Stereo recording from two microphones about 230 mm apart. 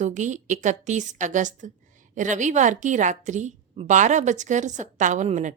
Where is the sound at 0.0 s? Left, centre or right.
Right.